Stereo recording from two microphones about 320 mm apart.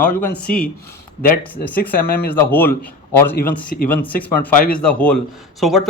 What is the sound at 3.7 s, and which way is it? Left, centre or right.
Speech, left.